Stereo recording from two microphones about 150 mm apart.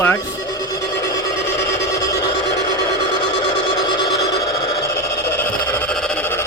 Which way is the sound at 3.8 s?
30° left (ahead or behind).